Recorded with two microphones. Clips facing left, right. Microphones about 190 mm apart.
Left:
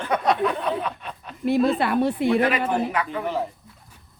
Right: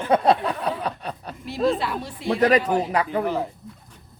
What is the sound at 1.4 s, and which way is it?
Speech, 55° left (ahead or behind).